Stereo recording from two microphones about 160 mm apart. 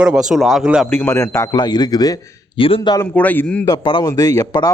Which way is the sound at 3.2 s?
10° left (ahead or behind).